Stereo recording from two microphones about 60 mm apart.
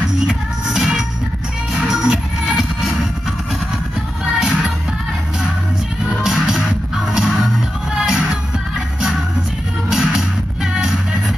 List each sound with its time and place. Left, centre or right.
0.3 s music: centre
4.4 s music: centre
6.0 s music: centre
9.8 s music: centre